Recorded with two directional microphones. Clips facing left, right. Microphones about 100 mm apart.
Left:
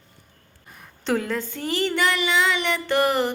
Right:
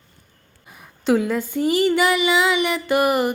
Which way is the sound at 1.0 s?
10° right (ahead or behind).